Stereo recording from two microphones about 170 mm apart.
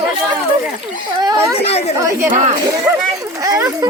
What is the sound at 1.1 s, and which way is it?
Speech, 25° right (ahead or behind).